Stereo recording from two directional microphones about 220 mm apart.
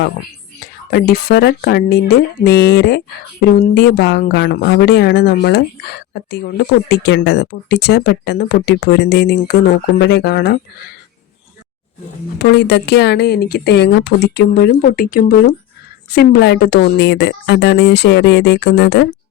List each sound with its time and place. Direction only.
0.6 s speech: 45° left (ahead or behind)
12.4 s speech: 50° left (ahead or behind)